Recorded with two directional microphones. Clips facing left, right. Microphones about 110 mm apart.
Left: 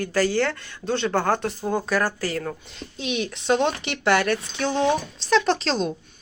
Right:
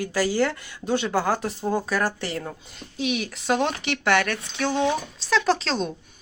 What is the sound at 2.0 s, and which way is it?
Speech, 25° right (ahead or behind).